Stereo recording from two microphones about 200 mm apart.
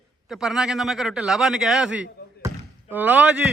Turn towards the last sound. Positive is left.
turn(degrees=-5)  # may be behind; listen again after turning